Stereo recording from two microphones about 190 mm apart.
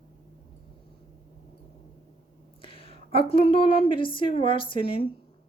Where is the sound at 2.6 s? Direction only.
30° left (ahead or behind).